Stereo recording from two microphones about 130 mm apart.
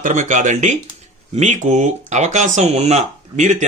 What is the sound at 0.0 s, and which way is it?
Speech, 75° right (ahead or behind).